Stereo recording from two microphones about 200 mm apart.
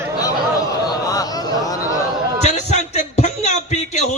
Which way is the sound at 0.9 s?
20° left (ahead or behind).